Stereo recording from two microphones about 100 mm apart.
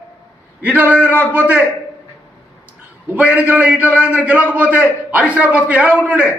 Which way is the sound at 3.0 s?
15° right (ahead or behind).